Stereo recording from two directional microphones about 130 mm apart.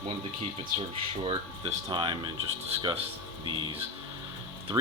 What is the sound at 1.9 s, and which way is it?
Speech, 40° right (ahead or behind).